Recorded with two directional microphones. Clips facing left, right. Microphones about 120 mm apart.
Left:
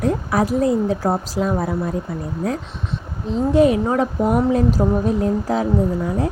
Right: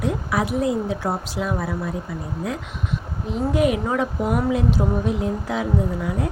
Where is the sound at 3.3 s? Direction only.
30° left (ahead or behind).